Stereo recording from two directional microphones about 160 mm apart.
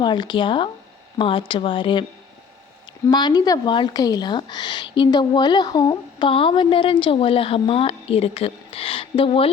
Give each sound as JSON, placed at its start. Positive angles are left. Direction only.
{"t": 0.0, "sound": "speech", "side_deg": 30}
{"t": 3.1, "sound": "speech", "side_deg": 25}